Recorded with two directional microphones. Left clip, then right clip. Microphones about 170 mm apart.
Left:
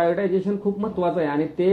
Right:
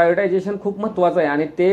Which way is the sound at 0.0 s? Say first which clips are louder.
Right 5 dB; 35° right (ahead or behind).